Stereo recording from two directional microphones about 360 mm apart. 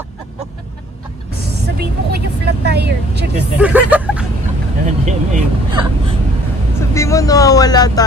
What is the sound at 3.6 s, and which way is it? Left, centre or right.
Speech, centre.